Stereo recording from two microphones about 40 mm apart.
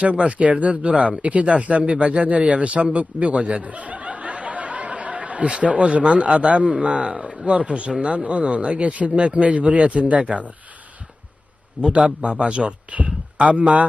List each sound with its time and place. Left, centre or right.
0.0 s speech: right
11.8 s speech: right